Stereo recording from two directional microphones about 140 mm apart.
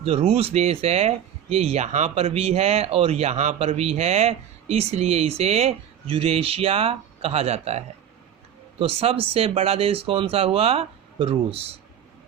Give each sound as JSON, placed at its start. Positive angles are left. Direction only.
{"t": 0.0, "sound": "speech", "side_deg": -45}